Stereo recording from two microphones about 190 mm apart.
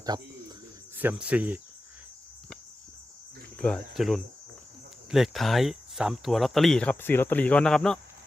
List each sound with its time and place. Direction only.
0.0 s a sound: 20° right (ahead or behind)
0.9 s speech: 5° right (ahead or behind)
3.6 s speech: centre (ahead or behind)